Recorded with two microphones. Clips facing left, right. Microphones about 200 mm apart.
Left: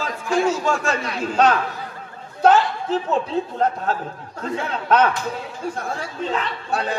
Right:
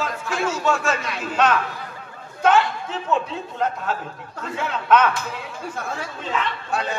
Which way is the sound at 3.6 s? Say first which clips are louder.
Right 1 dB; 35° left (ahead or behind).